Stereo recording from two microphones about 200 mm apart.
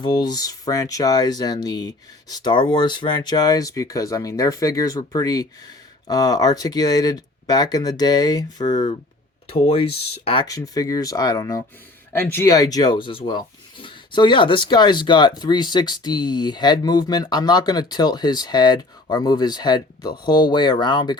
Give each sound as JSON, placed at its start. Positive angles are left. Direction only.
{"t": 0.0, "sound": "speech", "side_deg": 20}